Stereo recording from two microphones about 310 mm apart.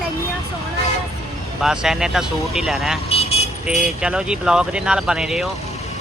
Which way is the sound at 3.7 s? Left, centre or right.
Centre.